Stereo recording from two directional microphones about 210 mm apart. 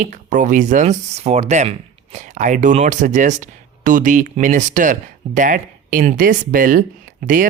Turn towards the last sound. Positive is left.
turn(degrees=-40)  # may be behind; listen again after turning